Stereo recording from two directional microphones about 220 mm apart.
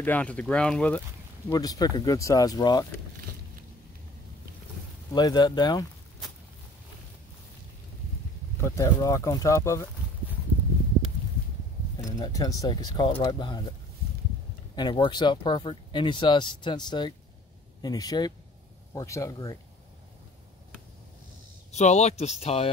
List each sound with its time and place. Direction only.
0.0 s speech: 5° left (ahead or behind)
1.5 s speech: 15° left (ahead or behind)
5.1 s speech: 20° left (ahead or behind)
8.5 s speech: 15° left (ahead or behind)
12.0 s speech: 15° left (ahead or behind)
14.8 s speech: 20° left (ahead or behind)
21.7 s speech: 30° left (ahead or behind)